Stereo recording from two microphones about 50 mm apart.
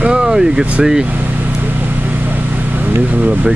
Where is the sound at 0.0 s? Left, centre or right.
Centre.